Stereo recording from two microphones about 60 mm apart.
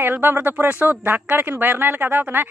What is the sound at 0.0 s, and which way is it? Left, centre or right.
Speech, right.